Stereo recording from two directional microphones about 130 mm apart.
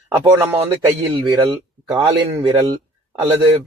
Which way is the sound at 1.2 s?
35° right (ahead or behind).